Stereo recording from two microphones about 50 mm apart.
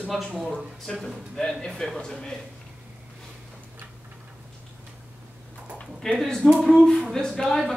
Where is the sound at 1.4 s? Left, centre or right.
Centre.